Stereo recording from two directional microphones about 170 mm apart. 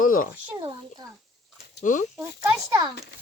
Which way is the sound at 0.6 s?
20° right (ahead or behind).